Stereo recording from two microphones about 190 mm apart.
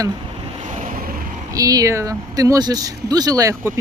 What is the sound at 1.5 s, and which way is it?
Speech, 20° right (ahead or behind).